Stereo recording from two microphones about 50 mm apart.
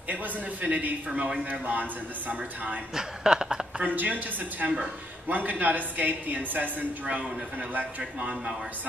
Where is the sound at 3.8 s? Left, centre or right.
Right.